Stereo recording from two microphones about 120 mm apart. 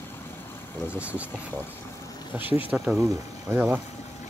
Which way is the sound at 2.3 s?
15° right (ahead or behind).